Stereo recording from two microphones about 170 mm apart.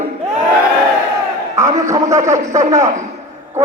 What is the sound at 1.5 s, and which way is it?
A man's voice, 15° right (ahead or behind).